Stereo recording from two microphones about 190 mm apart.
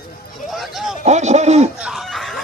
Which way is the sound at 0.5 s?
Centre (ahead or behind).